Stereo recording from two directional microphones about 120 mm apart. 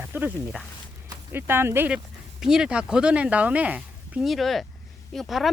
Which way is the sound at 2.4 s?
5° right (ahead or behind).